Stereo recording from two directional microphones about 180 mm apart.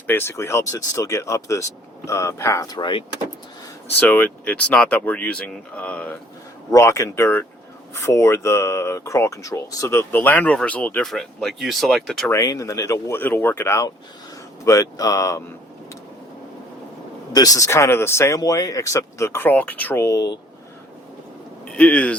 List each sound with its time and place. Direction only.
0.1 s speech: 15° left (ahead or behind)
4.0 s speech: 10° left (ahead or behind)
12.3 s speech: 15° left (ahead or behind)
17.3 s speech: 20° left (ahead or behind)
21.6 s speech: 5° left (ahead or behind)